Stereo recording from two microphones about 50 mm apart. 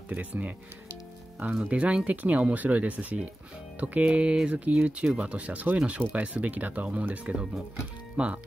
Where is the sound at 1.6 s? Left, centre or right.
Right.